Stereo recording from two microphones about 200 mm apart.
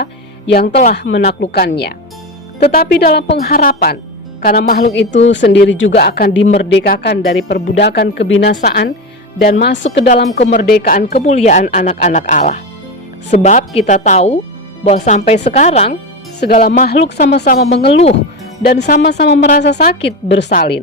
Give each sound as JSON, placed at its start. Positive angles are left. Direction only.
{"t": 0.0, "sound": "music", "side_deg": 55}
{"t": 0.8, "sound": "speech", "side_deg": 45}
{"t": 4.9, "sound": "speech", "side_deg": 60}
{"t": 10.3, "sound": "speech", "side_deg": 35}
{"t": 10.6, "sound": "speech", "side_deg": 50}
{"t": 16.6, "sound": "speech", "side_deg": 45}
{"t": 17.8, "sound": "speech", "side_deg": 30}
{"t": 18.6, "sound": "speech", "side_deg": 50}
{"t": 20.5, "sound": "speech", "side_deg": 45}